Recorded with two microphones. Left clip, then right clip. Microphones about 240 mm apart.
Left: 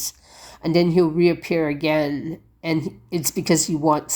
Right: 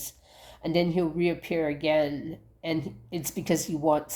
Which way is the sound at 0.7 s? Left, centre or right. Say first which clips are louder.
Left 8 dB; left.